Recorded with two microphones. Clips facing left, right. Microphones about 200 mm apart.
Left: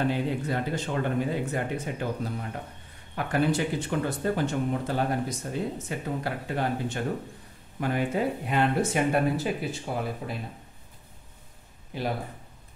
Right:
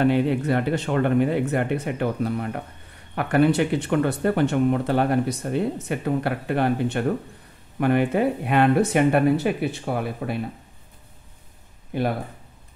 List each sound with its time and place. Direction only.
0.1 s speech: 65° right (ahead or behind)
11.9 s speech: 55° right (ahead or behind)